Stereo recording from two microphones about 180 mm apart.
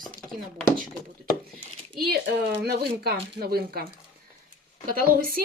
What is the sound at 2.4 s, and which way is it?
Speech, 65° right (ahead or behind).